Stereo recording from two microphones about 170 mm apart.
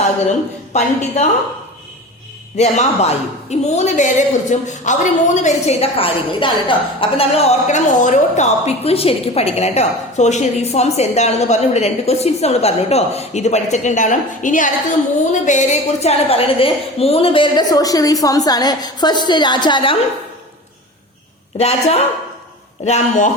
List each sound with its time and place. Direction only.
0.7 s a woman's voice: 40° left (ahead or behind)
2.6 s a woman's voice: 40° left (ahead or behind)
21.6 s a woman's voice: 35° left (ahead or behind)